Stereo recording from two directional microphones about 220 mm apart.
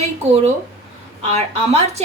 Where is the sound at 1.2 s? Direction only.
30° right (ahead or behind).